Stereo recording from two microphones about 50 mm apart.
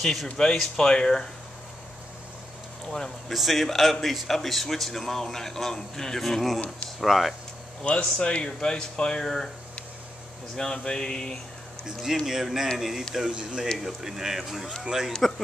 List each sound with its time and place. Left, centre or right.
0.0 s speech: centre
0.6 s speech: centre
2.9 s speech: centre
3.3 s speech: centre
7.8 s speech: left
10.5 s speech: centre
12.3 s speech: centre
15.1 s speech: centre